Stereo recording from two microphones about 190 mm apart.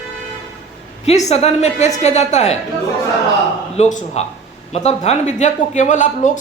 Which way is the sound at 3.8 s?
40° left (ahead or behind).